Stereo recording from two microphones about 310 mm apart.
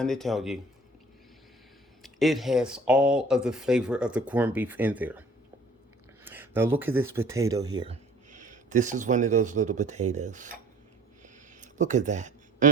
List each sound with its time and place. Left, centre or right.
0.0 s speech: centre
2.0 s speech: centre
6.2 s speech: centre; by 10.6 s right
11.6 s a sound: right